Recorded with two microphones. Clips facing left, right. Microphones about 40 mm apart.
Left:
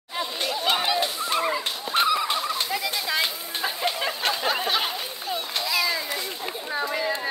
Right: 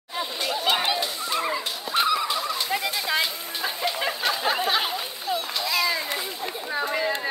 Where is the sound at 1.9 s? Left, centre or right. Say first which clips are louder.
Left 1 dB; left.